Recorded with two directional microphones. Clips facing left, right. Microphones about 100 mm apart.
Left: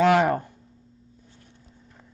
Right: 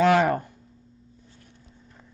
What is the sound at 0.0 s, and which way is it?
Speech, 20° left (ahead or behind).